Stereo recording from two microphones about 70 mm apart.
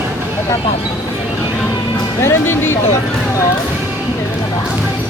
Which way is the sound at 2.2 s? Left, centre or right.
Left.